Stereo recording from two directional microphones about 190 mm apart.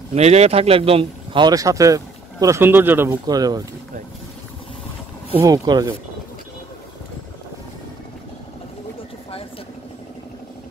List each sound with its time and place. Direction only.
0.1 s speech: 35° right (ahead or behind)
5.4 s speech: 20° right (ahead or behind)